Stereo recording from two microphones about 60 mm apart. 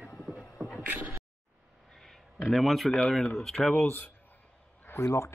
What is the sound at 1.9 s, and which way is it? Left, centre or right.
Speech, centre.